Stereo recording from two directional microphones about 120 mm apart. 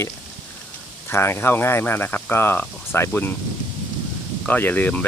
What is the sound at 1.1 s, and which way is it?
Speech, 20° left (ahead or behind).